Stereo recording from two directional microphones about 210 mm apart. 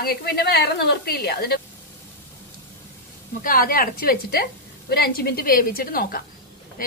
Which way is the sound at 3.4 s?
45° left (ahead or behind).